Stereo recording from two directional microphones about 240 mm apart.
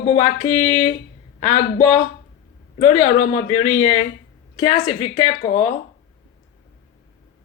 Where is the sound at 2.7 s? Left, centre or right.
Left.